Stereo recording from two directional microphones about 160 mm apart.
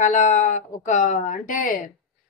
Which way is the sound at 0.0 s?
50° left (ahead or behind).